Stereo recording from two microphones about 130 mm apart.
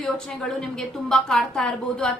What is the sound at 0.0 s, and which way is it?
A woman's voice, 5° left (ahead or behind).